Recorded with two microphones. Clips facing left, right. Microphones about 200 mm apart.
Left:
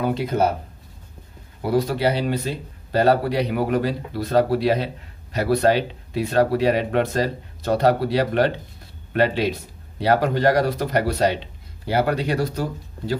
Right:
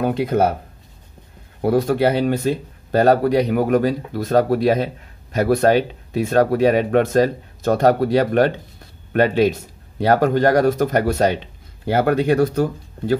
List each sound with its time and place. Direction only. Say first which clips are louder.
0.0 s speech: right 3 dB; 55° right (ahead or behind)
1.6 s speech: right 4 dB; 50° right (ahead or behind)